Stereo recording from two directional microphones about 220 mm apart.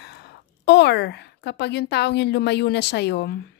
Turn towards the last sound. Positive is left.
turn(degrees=50)  # may be behind; listen again after turning